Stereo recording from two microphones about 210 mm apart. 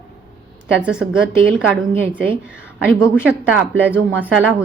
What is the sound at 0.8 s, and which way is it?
A woman's voice, 5° right (ahead or behind).